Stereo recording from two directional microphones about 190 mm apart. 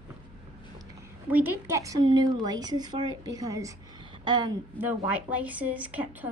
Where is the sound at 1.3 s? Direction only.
10° right (ahead or behind).